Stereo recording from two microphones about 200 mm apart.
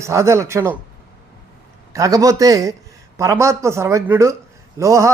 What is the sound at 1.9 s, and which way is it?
A man's voice, 15° right (ahead or behind).